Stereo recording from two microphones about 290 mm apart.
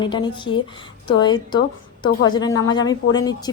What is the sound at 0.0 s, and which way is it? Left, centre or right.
Speech, centre.